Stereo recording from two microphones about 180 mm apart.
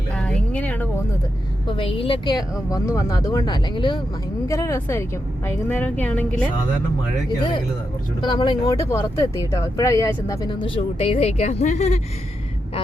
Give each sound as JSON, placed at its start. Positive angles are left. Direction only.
{"t": 0.1, "sound": "a sound", "side_deg": 5}
{"t": 1.6, "sound": "a woman's voice", "side_deg": 30}
{"t": 8.2, "sound": "speech", "side_deg": 25}